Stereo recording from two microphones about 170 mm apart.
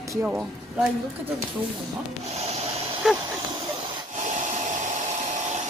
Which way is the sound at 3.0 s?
Centre (ahead or behind).